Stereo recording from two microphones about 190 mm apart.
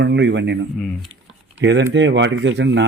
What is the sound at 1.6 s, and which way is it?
Speech, 65° right (ahead or behind).